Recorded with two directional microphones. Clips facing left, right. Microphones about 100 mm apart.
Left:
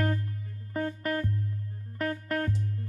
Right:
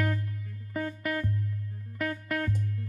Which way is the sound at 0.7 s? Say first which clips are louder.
Left 1 dB; 40° left (ahead or behind).